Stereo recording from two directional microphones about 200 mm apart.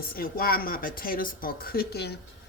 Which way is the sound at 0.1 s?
45° left (ahead or behind).